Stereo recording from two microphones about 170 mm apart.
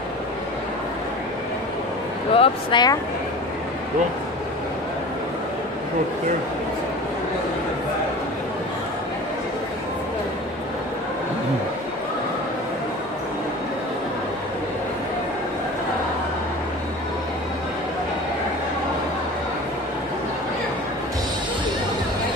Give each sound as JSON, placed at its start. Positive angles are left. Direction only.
{"t": 2.3, "sound": "speech", "side_deg": 30}